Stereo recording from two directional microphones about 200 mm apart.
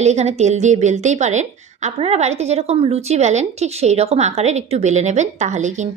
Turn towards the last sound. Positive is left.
turn(degrees=-35)  # may be behind; listen again after turning